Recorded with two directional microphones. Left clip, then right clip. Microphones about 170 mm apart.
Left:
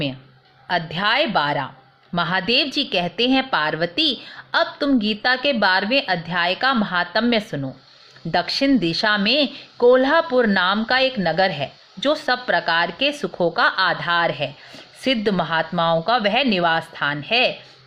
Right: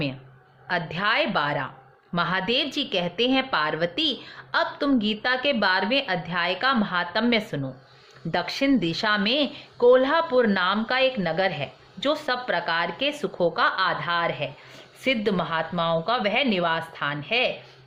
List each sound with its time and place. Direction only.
0.7 s a woman's voice: 15° left (ahead or behind)